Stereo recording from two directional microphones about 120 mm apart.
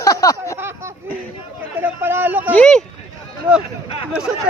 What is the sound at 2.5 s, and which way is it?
Speech, 10° left (ahead or behind).